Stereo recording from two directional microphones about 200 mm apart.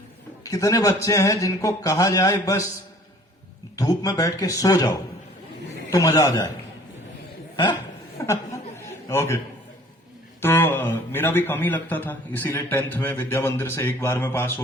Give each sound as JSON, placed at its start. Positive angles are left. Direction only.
{"t": 0.4, "sound": "a man's voice", "side_deg": 15}
{"t": 3.8, "sound": "a man's voice", "side_deg": 15}
{"t": 7.5, "sound": "speech", "side_deg": 20}
{"t": 8.8, "sound": "chuckle", "side_deg": 15}
{"t": 10.4, "sound": "a man's voice", "side_deg": 10}